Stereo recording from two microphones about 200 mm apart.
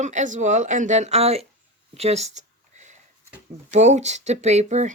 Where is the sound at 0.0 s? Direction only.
35° right (ahead or behind).